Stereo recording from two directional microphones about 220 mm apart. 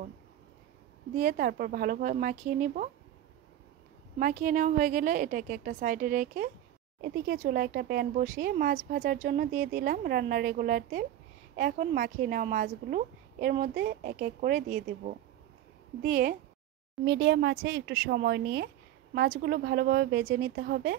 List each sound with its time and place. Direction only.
1.1 s speech: 40° right (ahead or behind)
4.2 s speech: 35° right (ahead or behind)